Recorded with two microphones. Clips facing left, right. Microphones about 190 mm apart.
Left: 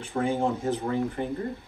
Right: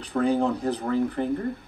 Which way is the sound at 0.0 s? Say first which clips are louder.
Right 3 dB; 40° right (ahead or behind).